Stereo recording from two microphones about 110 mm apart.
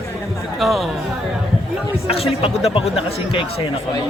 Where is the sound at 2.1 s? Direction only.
60° left (ahead or behind).